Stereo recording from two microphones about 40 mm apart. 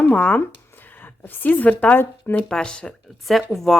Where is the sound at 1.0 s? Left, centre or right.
Left.